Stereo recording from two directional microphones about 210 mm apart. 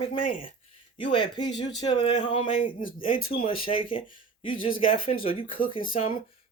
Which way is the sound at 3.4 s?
25° left (ahead or behind).